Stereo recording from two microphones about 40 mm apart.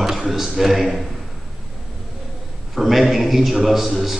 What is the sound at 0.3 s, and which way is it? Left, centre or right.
Speech, centre.